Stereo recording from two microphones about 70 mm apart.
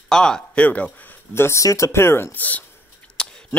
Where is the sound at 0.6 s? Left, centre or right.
Left.